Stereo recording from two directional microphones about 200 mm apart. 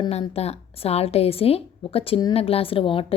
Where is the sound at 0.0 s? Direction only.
30° left (ahead or behind).